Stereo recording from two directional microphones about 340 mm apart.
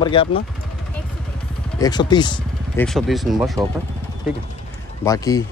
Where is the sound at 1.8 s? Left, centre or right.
Centre.